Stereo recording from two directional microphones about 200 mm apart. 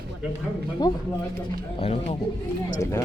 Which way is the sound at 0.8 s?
20° left (ahead or behind).